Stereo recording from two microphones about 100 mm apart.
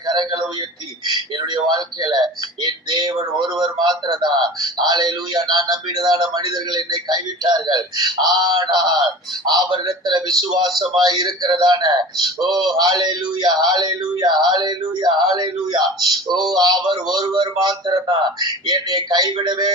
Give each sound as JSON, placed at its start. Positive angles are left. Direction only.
{"t": 1.0, "sound": "a man's voice", "side_deg": -45}